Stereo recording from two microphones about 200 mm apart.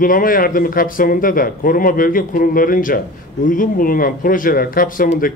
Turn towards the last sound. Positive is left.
turn(degrees=45)  # may be behind; listen again after turning